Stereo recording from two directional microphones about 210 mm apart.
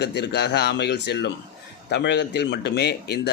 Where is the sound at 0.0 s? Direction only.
50° left (ahead or behind).